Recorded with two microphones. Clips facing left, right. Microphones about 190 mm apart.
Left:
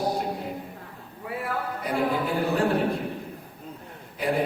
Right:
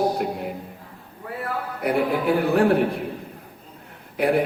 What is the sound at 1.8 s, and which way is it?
Speech, 65° right (ahead or behind).